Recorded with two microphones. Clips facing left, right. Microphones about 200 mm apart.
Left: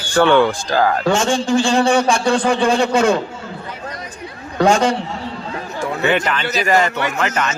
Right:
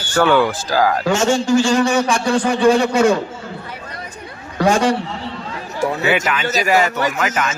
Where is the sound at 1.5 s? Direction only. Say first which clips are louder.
Left 2 dB; 30° left (ahead or behind).